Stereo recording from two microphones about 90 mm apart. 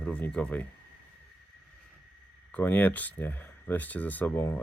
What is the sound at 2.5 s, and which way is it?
Speech, 25° left (ahead or behind).